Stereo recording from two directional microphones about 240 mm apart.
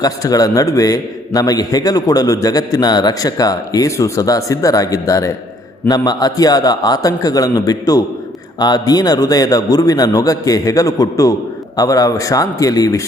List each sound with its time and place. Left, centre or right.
0.0 s a man's voice: centre